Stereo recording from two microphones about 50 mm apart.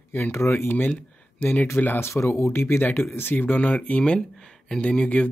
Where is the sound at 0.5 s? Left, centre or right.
Left.